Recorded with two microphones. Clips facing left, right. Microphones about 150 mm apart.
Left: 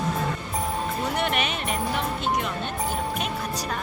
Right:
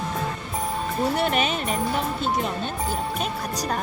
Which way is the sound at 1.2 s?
35° right (ahead or behind).